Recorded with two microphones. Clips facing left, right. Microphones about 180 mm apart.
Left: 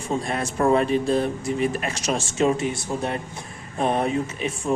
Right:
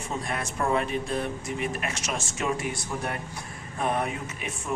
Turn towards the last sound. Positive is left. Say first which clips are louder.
# left 8 dB
turn(degrees=30)  # may be behind; listen again after turning